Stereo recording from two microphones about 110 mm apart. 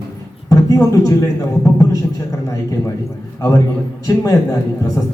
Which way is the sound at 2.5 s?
30° left (ahead or behind).